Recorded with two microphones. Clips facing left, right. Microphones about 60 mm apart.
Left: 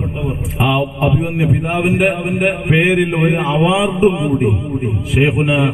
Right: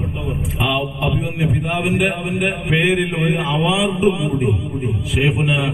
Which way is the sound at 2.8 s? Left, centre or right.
Left.